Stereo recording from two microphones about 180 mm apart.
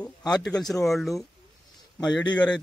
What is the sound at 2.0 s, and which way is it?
Speech, 20° left (ahead or behind).